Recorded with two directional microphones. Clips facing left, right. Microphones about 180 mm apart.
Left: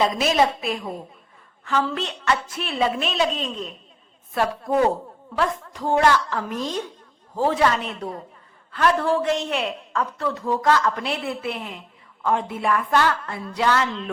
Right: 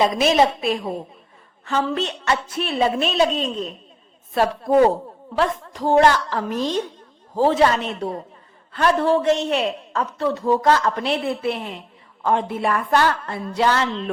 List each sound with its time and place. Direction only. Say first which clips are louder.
0.0 s a woman's voice: right 3 dB; 25° right (ahead or behind)
4.4 s a woman's voice: right 5 dB; 35° right (ahead or behind)